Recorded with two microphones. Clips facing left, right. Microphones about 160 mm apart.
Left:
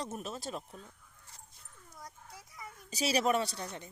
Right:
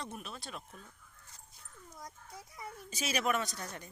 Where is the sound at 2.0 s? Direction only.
25° right (ahead or behind).